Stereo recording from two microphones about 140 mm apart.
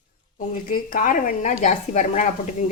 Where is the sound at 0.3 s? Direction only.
85° left.